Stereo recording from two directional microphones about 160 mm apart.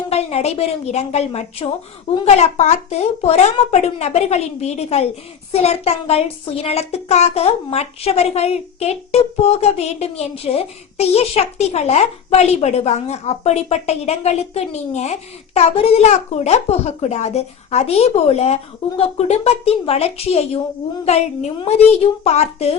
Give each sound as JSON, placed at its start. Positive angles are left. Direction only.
{"t": 0.1, "sound": "a child's voice", "side_deg": 40}